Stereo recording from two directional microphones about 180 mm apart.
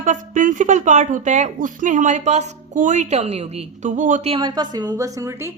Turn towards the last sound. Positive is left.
turn(degrees=-15)  # may be behind; listen again after turning